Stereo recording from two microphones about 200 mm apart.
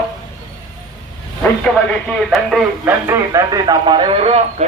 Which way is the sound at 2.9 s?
15° right (ahead or behind).